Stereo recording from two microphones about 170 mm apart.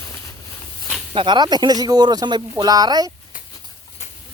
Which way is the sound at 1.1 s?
30° right (ahead or behind).